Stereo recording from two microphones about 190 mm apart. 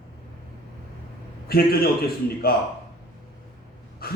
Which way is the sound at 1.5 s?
55° left (ahead or behind).